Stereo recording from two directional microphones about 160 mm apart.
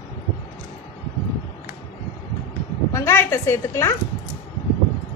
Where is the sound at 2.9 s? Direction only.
20° left (ahead or behind).